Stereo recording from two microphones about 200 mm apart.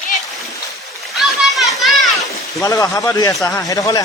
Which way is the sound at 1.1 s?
Centre (ahead or behind).